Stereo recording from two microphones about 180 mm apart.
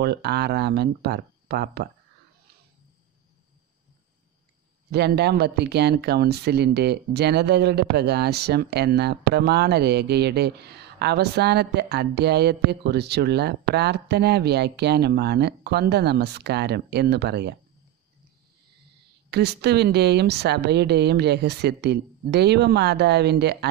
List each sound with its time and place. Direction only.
0.0 s speech: 65° right (ahead or behind)
4.9 s speech: 65° right (ahead or behind)
19.3 s a woman's voice: 65° right (ahead or behind)